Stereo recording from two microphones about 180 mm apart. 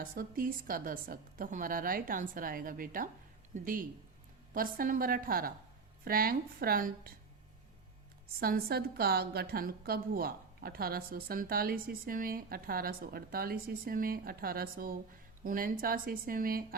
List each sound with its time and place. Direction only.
0.0 s a woman's voice: 55° right (ahead or behind)
8.4 s a woman's voice: 55° right (ahead or behind)